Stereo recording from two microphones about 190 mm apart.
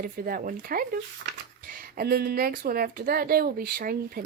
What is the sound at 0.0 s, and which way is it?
Speech, 50° right (ahead or behind).